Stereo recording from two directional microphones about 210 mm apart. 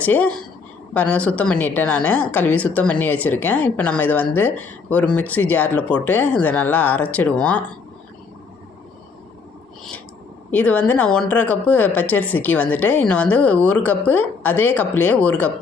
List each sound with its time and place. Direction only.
0.0 s speech: 5° left (ahead or behind)
10.5 s speech: 5° left (ahead or behind)